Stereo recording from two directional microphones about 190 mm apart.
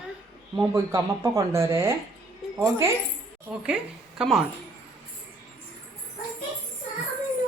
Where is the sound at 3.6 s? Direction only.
5° right (ahead or behind).